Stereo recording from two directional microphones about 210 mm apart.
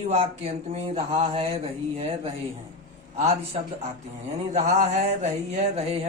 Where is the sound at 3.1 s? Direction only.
30° right (ahead or behind).